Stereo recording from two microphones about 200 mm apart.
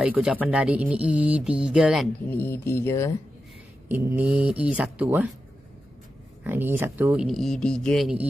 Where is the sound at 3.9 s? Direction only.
10° right (ahead or behind).